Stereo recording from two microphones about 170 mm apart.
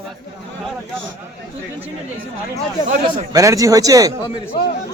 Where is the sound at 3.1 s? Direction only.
20° right (ahead or behind).